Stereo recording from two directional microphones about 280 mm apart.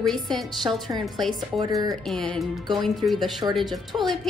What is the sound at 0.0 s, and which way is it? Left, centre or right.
A woman's voice, centre.